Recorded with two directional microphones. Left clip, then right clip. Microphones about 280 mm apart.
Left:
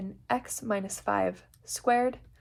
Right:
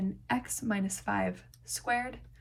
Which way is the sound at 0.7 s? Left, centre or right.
Centre.